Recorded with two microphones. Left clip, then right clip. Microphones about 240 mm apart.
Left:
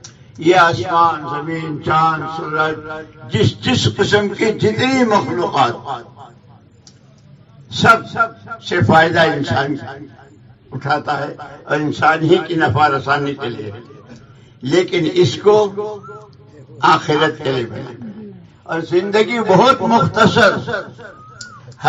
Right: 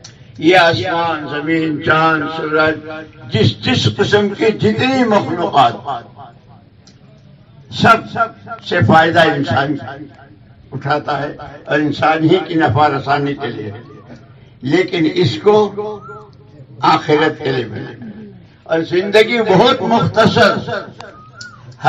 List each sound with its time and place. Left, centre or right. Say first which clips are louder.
0.4 s a man's voice: right 2 dB; left
2.9 s a man's voice: right 1 dB; left
7.7 s a man's voice: right 1 dB; left
10.8 s a man's voice: right 1 dB; left